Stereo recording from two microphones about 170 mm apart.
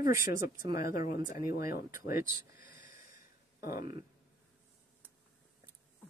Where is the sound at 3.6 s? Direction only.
55° left (ahead or behind).